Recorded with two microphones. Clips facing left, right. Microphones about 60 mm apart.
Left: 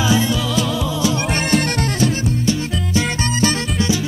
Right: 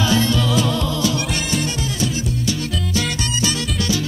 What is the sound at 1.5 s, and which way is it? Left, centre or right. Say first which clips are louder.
Music: left 5 dB; left.